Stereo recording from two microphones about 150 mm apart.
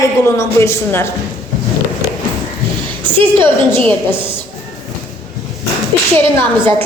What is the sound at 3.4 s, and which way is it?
Speech, 10° left (ahead or behind).